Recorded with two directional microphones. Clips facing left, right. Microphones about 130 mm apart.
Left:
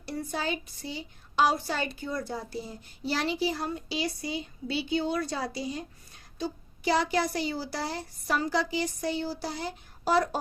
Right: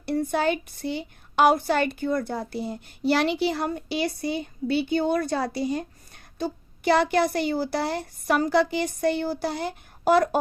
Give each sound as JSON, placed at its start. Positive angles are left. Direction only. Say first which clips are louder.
{"t": 0.0, "sound": "a woman's voice", "louder": "right 9 dB", "side_deg": -60}